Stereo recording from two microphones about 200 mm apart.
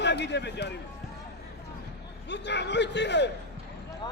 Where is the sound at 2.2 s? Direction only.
60° left (ahead or behind).